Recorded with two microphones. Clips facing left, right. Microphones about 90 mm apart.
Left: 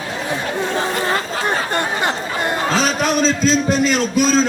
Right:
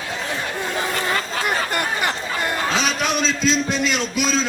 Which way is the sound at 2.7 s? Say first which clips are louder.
Left 6 dB; 40° left (ahead or behind).